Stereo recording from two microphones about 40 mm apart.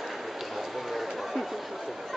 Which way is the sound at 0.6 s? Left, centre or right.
Centre.